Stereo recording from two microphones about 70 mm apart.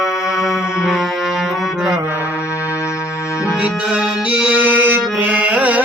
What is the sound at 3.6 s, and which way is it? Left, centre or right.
Music, centre.